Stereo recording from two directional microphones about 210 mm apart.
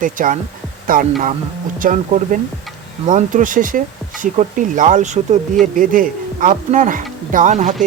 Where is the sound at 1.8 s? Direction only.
40° right (ahead or behind).